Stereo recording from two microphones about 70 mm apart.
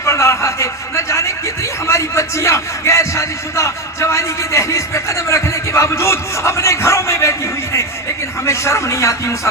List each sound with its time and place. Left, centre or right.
0.0 s a sound: left
1.9 s music: left
8.4 s a man's voice: left